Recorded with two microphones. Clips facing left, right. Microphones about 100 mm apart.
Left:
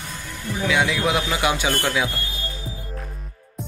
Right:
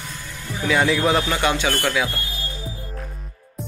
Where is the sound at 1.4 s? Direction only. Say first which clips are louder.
Right 1 dB; 15° left (ahead or behind).